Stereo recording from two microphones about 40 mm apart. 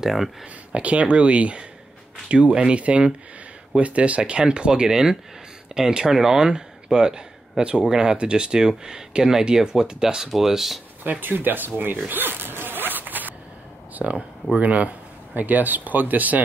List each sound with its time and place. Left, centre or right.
0.0 s speech: centre
0.7 s speech: right
4.2 s speech: right; by 10.8 s centre
11.1 s speech: right
12.1 s zipper: right
14.0 s speech: centre
14.6 s speech: right